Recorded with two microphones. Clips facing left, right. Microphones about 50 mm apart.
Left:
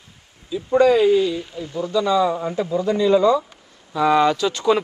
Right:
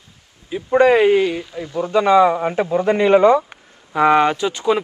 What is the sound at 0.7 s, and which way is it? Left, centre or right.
Speech, right.